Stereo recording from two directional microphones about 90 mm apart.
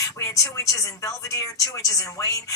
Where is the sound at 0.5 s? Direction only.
35° left (ahead or behind).